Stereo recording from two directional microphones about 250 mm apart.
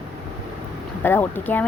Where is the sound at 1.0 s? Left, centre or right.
Centre.